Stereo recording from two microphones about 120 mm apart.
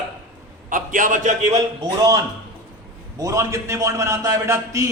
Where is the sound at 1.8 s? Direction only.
30° right (ahead or behind).